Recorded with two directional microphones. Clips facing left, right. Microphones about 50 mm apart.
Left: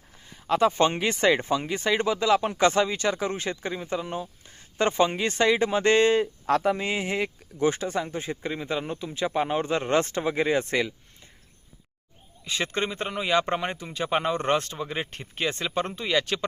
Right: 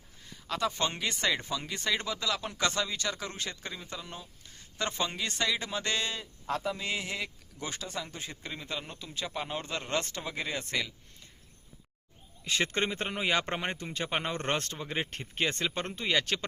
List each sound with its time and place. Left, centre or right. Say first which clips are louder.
0.4 s speech: left 10 dB; left
6.4 s speech: left 10 dB; left
6.8 s speech: left 7 dB; left
12.5 s speech: left 2 dB; centre